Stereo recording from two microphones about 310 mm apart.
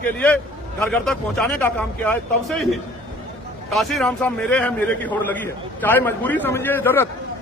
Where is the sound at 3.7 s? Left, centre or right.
Centre.